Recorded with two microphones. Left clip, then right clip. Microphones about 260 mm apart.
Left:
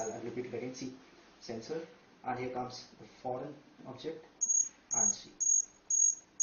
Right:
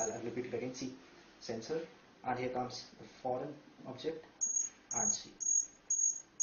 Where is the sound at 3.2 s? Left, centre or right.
Left.